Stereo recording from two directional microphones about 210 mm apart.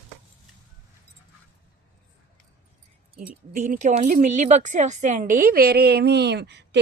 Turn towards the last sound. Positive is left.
turn(degrees=-55)  # may be behind; listen again after turning